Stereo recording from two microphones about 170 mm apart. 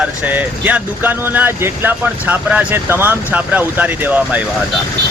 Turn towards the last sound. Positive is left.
turn(degrees=-10)  # may be behind; listen again after turning